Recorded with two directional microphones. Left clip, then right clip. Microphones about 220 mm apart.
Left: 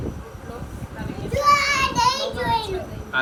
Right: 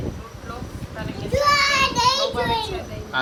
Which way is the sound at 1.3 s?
Centre (ahead or behind).